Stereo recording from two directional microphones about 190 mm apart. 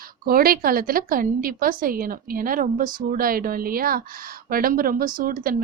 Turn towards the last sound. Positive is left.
turn(degrees=-50)  # may be behind; listen again after turning